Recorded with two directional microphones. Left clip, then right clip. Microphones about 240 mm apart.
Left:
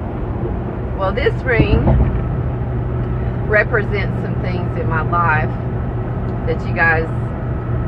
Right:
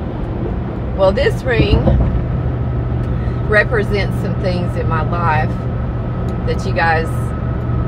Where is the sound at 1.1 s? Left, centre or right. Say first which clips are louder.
Right 1 dB; centre.